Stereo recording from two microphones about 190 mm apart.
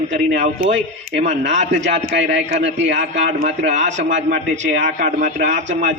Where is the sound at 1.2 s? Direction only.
35° right (ahead or behind).